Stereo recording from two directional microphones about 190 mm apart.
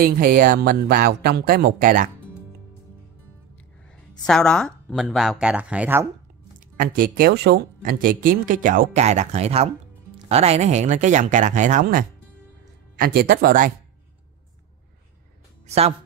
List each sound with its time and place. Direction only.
0.0 s speech: 50° right (ahead or behind)
4.3 s speech: 5° left (ahead or behind)
6.8 s speech: 45° right (ahead or behind)
15.6 s music: 35° right (ahead or behind)